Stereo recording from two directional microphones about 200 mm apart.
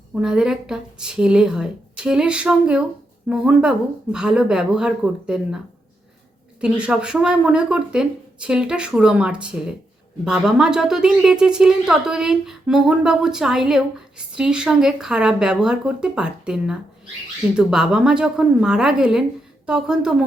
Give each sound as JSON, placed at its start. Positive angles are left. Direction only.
{"t": 0.1, "sound": "a woman's voice", "side_deg": -5}
{"t": 6.6, "sound": "a woman's voice", "side_deg": -5}